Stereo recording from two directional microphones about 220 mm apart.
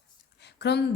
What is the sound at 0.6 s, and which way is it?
Speech, 50° left (ahead or behind).